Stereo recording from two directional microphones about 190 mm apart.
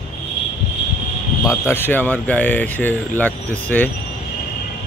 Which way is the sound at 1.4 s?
15° left (ahead or behind).